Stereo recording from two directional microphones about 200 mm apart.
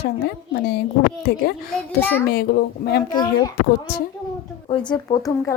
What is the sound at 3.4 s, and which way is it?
A woman's voice, 20° left (ahead or behind).